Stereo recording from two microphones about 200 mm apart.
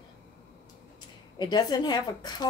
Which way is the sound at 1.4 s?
20° left (ahead or behind).